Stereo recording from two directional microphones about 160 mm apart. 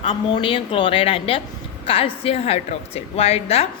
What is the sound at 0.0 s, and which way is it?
Speech, 35° left (ahead or behind).